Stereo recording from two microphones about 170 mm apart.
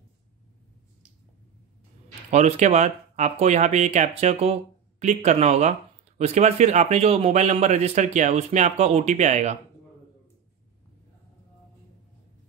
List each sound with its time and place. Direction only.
2.3 s speech: 40° right (ahead or behind)